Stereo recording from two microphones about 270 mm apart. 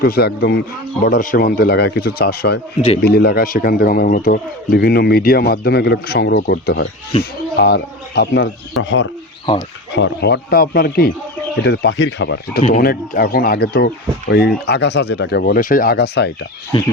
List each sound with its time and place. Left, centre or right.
0.0 s speech: left
16.7 s speech: centre